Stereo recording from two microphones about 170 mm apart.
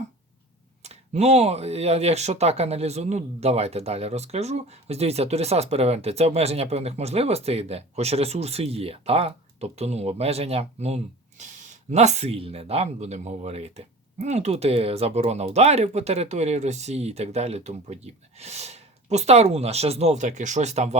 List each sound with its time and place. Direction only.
0.8 s speech: 40° right (ahead or behind)